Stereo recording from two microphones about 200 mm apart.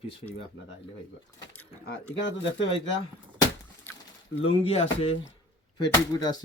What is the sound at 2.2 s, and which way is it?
Speech, 65° left (ahead or behind).